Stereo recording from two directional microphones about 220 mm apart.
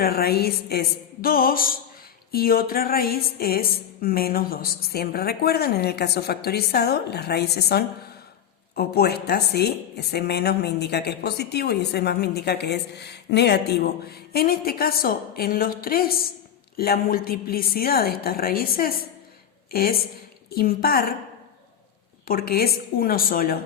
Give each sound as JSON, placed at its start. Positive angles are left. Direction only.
{"t": 0.0, "sound": "a woman's voice", "side_deg": 45}
{"t": 22.3, "sound": "a woman's voice", "side_deg": 45}